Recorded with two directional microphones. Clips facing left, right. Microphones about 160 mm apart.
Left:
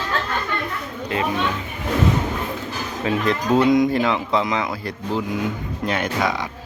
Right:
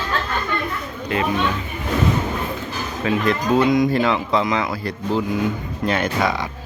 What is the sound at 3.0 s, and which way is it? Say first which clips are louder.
Speech: right 1 dB; 25° left (ahead or behind).